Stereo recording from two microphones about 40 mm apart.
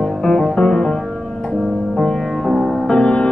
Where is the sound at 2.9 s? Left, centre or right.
Centre.